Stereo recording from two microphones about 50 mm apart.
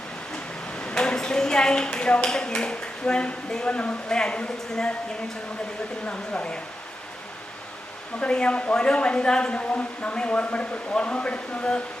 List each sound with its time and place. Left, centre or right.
0.8 s speech: centre
6.1 s speech: left
8.2 s speech: left